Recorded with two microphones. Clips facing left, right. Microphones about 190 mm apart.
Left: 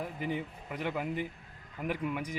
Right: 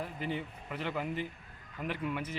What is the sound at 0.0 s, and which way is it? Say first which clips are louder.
Speech: left 2 dB; 15° left (ahead or behind).